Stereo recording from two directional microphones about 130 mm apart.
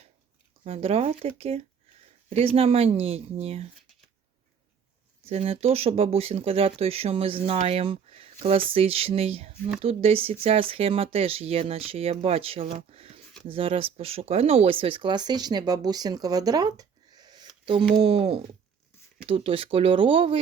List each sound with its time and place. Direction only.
0.6 s speech: 50° right (ahead or behind)
5.2 s speech: 50° right (ahead or behind)